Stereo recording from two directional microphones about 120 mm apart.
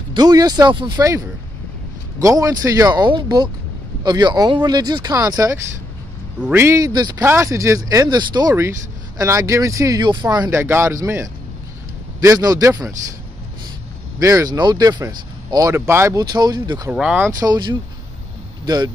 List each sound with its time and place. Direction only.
0.1 s speech: 35° right (ahead or behind)
2.1 s speech: 30° right (ahead or behind)
6.4 s speech: 20° right (ahead or behind)
6.9 s speech: 35° right (ahead or behind)
7.2 s speech: 25° right (ahead or behind)
10.5 s speech: 20° right (ahead or behind)
14.2 s speech: 30° right (ahead or behind)
16.2 s speech: 35° right (ahead or behind)
16.9 s speech: 10° right (ahead or behind)
17.4 s speech: 35° right (ahead or behind)